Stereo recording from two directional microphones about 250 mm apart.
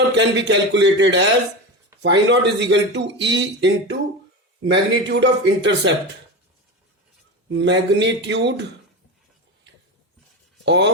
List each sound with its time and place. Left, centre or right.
0.1 s speech: right
7.5 s speech: right
10.7 s speech: right